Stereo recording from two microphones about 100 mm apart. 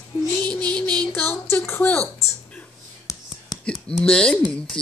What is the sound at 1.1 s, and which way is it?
Speech, 20° left (ahead or behind).